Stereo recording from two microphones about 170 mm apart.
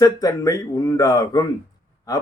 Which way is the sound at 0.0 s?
20° left (ahead or behind).